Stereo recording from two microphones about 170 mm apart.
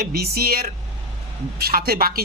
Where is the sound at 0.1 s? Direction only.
65° right (ahead or behind).